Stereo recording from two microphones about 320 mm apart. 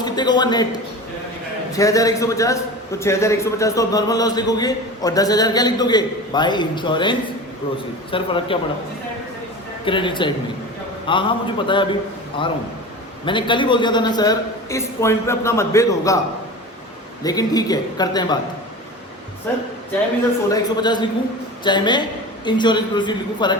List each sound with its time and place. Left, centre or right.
0.0 s a man's voice: centre
9.8 s a man's voice: centre
17.2 s a man's voice: centre
19.5 s a man's voice: centre